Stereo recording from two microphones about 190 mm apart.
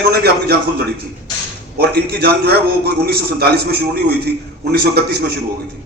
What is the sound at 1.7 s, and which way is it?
A man's voice, 55° right (ahead or behind).